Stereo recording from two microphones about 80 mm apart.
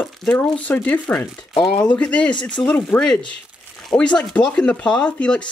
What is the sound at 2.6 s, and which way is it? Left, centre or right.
Speech, left.